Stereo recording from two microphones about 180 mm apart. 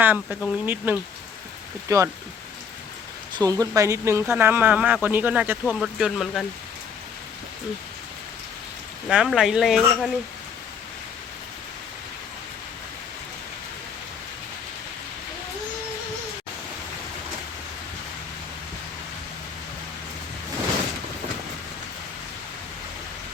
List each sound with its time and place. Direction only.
0.0 s speech: 10° right (ahead or behind)
3.3 s speech: 20° right (ahead or behind); by 6.4 s centre (ahead or behind)
9.0 s speech: 5° right (ahead or behind)